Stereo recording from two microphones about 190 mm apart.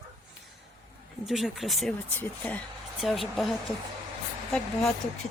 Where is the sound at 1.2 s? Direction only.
Centre (ahead or behind).